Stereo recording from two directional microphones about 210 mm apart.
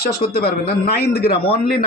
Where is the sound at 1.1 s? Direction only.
50° left (ahead or behind).